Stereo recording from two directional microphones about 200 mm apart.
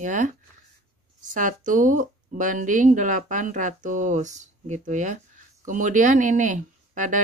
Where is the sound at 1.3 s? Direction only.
40° right (ahead or behind).